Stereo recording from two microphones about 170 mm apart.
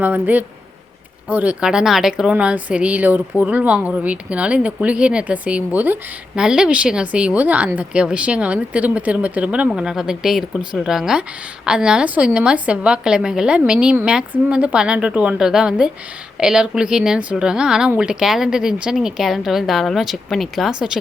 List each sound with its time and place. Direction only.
0.0 s a woman's voice: 10° right (ahead or behind)